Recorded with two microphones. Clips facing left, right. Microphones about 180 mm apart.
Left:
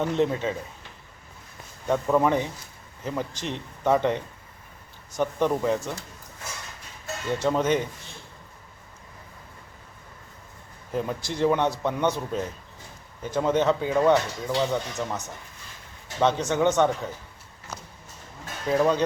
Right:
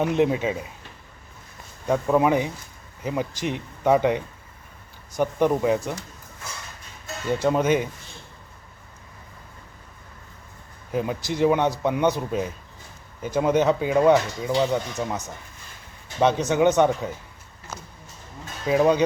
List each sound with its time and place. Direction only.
0.0 s speech: 10° right (ahead or behind)
1.9 s speech: 5° right (ahead or behind)
7.3 s speech: 5° right (ahead or behind)
10.9 s speech: 10° right (ahead or behind)
16.2 s speech: 15° right (ahead or behind)
18.6 s speech: 10° right (ahead or behind)